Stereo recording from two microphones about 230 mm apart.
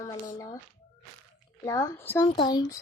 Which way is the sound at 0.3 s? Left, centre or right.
Centre.